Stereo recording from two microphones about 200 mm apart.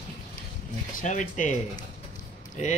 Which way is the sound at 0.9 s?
40° left (ahead or behind).